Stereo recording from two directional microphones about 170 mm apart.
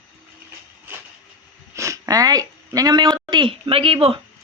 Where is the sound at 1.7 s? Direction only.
20° right (ahead or behind).